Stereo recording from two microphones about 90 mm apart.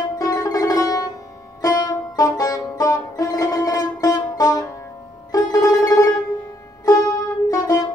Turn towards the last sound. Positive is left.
turn(degrees=40)  # may be behind; listen again after turning